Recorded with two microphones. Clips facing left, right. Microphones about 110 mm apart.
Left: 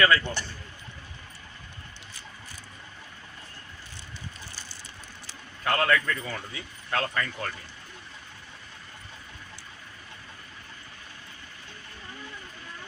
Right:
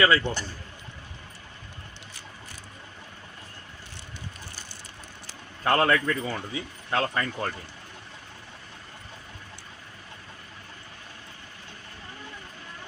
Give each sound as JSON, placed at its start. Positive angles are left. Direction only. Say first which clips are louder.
{"t": 0.0, "sound": "speech", "louder": "right 1 dB", "side_deg": -20}
{"t": 5.6, "sound": "speech", "louder": "right 3 dB", "side_deg": -30}